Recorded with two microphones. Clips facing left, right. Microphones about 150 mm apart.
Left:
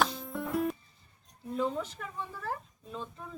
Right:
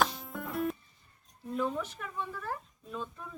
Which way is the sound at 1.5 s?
25° left (ahead or behind).